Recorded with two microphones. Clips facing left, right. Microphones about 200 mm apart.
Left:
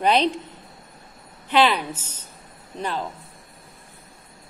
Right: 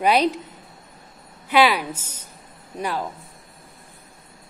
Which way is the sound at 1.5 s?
10° right (ahead or behind).